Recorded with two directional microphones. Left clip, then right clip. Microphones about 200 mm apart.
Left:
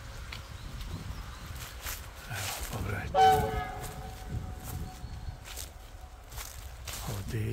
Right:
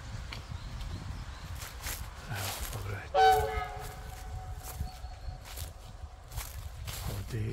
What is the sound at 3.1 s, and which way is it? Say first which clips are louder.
Train: left 1 dB; 45° right (ahead or behind).